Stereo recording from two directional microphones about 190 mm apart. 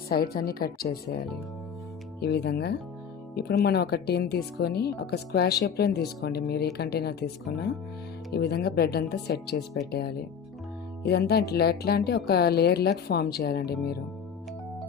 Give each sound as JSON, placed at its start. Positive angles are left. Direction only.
{"t": 0.1, "sound": "speech", "side_deg": 55}
{"t": 2.2, "sound": "speech", "side_deg": 60}